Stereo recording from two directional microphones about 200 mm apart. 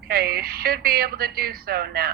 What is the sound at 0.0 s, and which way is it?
A woman's voice, 50° right (ahead or behind).